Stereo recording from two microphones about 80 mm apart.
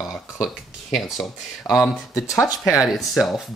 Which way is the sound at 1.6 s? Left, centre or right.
Left.